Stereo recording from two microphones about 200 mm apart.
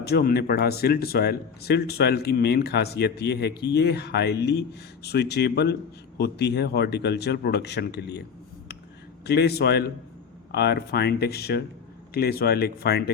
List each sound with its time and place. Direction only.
0.0 s a man's voice: 50° left (ahead or behind)
9.2 s a man's voice: 55° left (ahead or behind)